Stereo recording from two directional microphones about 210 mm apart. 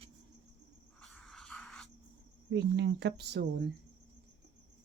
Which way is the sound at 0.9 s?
5° left (ahead or behind).